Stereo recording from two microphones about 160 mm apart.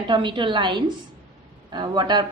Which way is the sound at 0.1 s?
30° right (ahead or behind).